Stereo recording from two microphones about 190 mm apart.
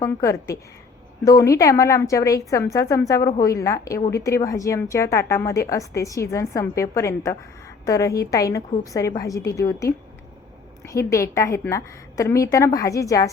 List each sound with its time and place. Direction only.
0.0 s a woman's voice: 15° left (ahead or behind)
10.9 s a woman's voice: 15° left (ahead or behind)